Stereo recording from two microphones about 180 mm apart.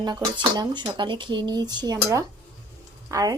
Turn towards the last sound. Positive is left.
turn(degrees=-20)  # may be behind; listen again after turning